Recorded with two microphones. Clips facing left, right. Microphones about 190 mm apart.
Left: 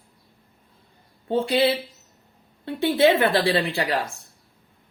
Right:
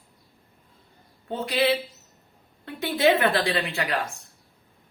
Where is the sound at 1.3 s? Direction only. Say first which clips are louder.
Left 4 dB; 30° left (ahead or behind).